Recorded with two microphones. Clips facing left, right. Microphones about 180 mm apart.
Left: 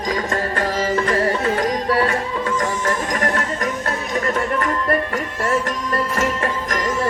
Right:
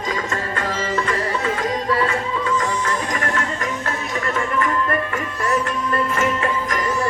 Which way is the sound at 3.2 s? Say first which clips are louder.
Left 3 dB; 40° left (ahead or behind).